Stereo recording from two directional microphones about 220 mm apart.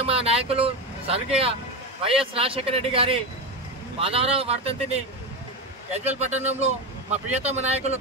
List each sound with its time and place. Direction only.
0.0 s vehicle: 25° right (ahead or behind)
2.0 s speech: 25° right (ahead or behind)